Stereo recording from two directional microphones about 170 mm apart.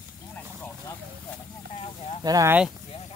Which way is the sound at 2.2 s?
20° right (ahead or behind).